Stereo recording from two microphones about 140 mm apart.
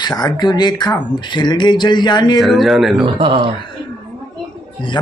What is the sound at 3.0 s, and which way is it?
Speech, 40° right (ahead or behind).